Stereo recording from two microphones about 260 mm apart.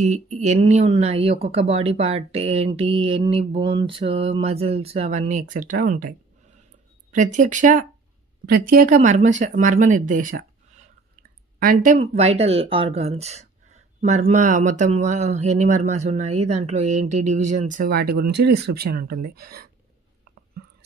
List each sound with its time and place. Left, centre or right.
0.0 s speech: right
7.3 s speech: right
11.6 s speech: right